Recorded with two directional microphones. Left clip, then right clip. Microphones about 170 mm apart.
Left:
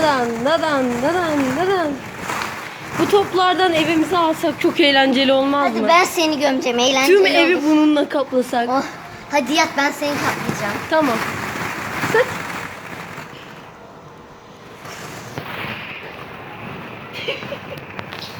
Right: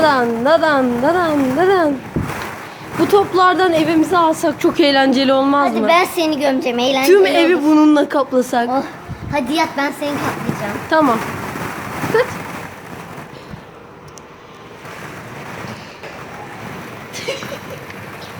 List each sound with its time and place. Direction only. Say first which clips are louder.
0.0 s speech: right 4 dB; 15° right (ahead or behind)
3.0 s speech: right 3 dB; 15° right (ahead or behind)
6.0 s a woman's voice: even; centre (ahead or behind)
9.3 s a woman's voice: left 1 dB; centre (ahead or behind)
10.8 s speech: right 4 dB; 15° right (ahead or behind)
12.1 s a sound: right 1 dB; 5° right (ahead or behind)